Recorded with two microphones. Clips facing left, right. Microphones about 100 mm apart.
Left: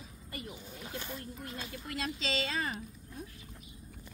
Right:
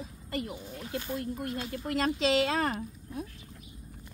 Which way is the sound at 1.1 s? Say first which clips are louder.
Right 9 dB; 60° right (ahead or behind).